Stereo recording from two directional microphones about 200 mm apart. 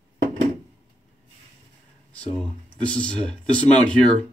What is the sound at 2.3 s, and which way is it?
Speech, 5° left (ahead or behind).